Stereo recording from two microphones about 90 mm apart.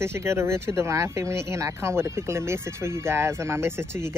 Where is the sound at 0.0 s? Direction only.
30° right (ahead or behind).